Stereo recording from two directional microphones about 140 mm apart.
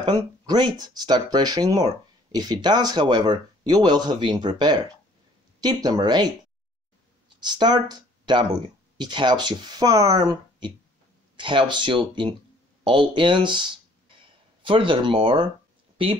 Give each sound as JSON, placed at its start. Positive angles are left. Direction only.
{"t": 0.0, "sound": "speech", "side_deg": -30}
{"t": 7.4, "sound": "speech", "side_deg": -30}